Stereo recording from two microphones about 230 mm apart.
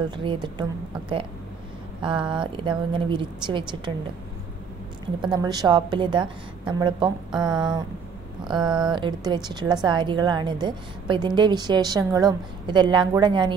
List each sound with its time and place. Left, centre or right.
0.1 s a woman's voice: right
5.2 s a woman's voice: centre